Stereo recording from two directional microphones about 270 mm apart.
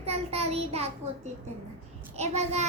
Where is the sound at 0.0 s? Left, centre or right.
Right.